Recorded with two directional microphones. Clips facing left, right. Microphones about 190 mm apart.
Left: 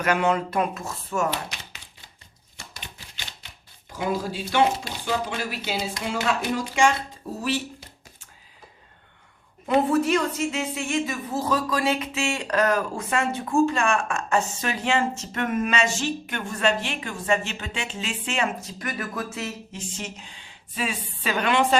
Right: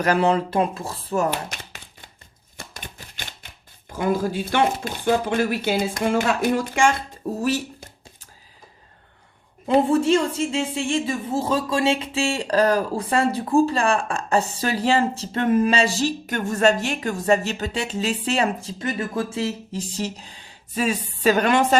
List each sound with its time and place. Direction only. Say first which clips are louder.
0.0 s a woman's voice: right 3 dB; 35° right (ahead or behind)
1.3 s a sound: right 3 dB; 50° right (ahead or behind)
3.4 s chopping: right 2 dB; 50° right (ahead or behind)
3.9 s speech: right 5 dB; 50° right (ahead or behind)
7.3 s a sound: right 3 dB; 45° right (ahead or behind)
9.6 s a woman's voice: right 3 dB; 25° right (ahead or behind); by 21.8 s 45° right (ahead or behind)